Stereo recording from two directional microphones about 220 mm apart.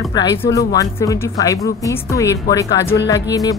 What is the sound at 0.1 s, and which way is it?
Speech, 15° left (ahead or behind).